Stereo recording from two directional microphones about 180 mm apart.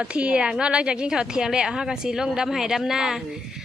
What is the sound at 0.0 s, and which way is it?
A woman's voice, 5° right (ahead or behind).